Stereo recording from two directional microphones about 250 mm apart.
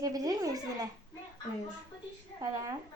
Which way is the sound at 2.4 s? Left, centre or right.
Centre.